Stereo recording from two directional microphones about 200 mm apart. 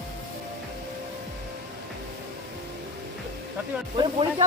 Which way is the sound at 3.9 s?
25° right (ahead or behind).